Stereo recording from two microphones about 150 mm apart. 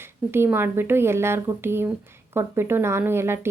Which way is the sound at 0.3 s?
15° right (ahead or behind).